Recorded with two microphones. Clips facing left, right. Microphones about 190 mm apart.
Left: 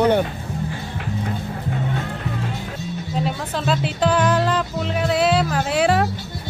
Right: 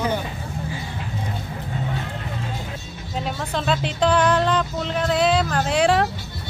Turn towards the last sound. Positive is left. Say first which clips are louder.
# even
turn(degrees=5)  # may be behind; listen again after turning